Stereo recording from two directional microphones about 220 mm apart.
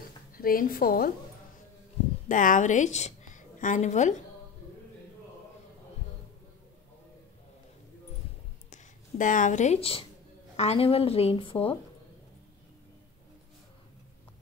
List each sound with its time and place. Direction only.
0.4 s a woman's voice: 40° left (ahead or behind)
2.2 s a woman's voice: 35° left (ahead or behind)
8.7 s a woman's voice: 35° left (ahead or behind)